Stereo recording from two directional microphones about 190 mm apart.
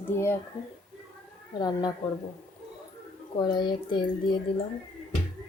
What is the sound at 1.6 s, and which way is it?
Speech, 20° left (ahead or behind).